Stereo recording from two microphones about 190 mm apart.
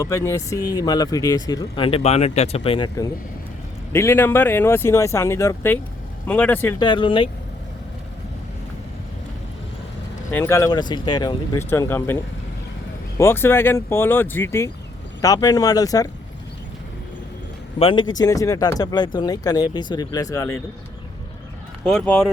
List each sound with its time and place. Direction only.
0.0 s speech: 15° left (ahead or behind)
6.7 s speech: 25° left (ahead or behind)
10.3 s speech: 15° left (ahead or behind)
13.1 s speech: 10° left (ahead or behind)
17.7 s speech: 25° left (ahead or behind)
21.8 s speech: 5° left (ahead or behind)